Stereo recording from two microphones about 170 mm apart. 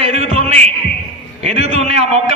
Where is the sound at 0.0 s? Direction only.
35° right (ahead or behind).